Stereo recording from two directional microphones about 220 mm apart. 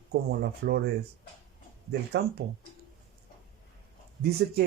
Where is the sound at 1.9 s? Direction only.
50° right (ahead or behind).